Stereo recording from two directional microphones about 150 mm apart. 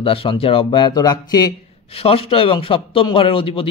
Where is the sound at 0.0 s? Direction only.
35° left (ahead or behind).